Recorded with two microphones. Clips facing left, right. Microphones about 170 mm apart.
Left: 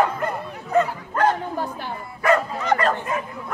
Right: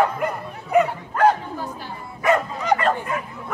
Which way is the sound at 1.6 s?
60° left (ahead or behind).